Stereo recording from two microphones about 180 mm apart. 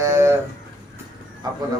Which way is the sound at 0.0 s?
15° right (ahead or behind).